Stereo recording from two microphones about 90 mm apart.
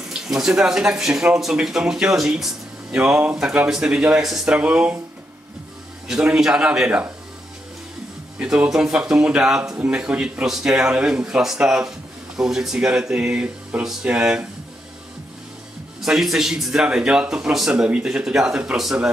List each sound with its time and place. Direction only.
0.1 s speech: 5° right (ahead or behind)
6.0 s speech: 10° right (ahead or behind)
8.4 s speech: 10° right (ahead or behind)
16.0 s speech: 5° right (ahead or behind)